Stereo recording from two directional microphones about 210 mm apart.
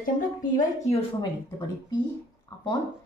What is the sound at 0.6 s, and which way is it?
Speech, 35° left (ahead or behind).